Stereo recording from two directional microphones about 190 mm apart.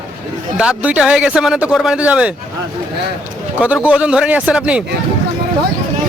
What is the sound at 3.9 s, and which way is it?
Speech, 5° right (ahead or behind).